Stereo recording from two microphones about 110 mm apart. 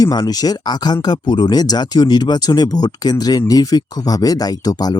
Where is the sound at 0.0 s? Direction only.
35° left (ahead or behind).